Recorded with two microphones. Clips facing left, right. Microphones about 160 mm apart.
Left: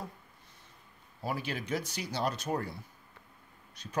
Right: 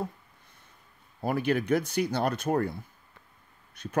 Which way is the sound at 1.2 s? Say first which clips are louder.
Right 9 dB; 55° right (ahead or behind).